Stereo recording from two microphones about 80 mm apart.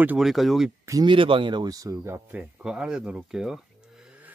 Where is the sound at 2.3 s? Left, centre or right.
Centre.